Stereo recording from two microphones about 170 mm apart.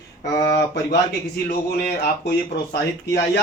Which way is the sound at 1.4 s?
75° left (ahead or behind).